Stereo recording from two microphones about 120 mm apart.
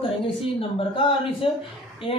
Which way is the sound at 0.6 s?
50° left (ahead or behind).